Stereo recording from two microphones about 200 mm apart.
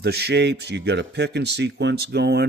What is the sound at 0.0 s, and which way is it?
Speech, 55° right (ahead or behind).